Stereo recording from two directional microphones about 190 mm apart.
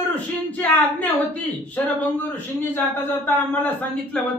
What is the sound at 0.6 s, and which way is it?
Speech, 10° left (ahead or behind).